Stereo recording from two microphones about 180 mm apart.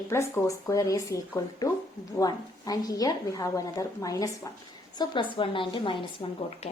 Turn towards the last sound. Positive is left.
turn(degrees=30)  # may be behind; listen again after turning